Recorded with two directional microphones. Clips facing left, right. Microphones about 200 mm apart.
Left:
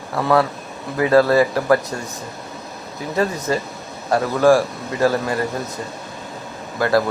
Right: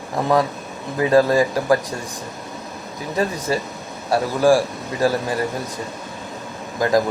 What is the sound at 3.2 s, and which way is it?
A man's voice, 10° right (ahead or behind).